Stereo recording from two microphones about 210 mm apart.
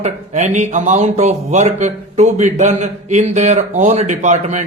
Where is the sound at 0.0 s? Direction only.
35° right (ahead or behind).